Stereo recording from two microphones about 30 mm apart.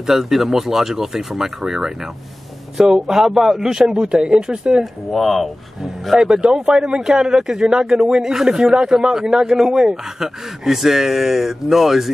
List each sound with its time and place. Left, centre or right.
0.0 s a man's voice: centre
3.6 s speech: right
5.1 s speech: centre
6.1 s a man's voice: right; by 12.1 s centre